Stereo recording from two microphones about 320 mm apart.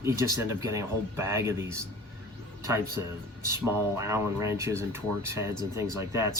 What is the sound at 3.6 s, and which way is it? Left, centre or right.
Speech, centre.